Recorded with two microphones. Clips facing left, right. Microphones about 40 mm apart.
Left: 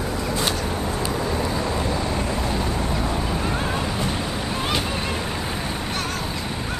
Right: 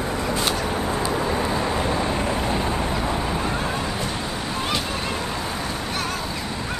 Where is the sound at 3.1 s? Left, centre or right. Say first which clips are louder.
Right 1 dB; centre.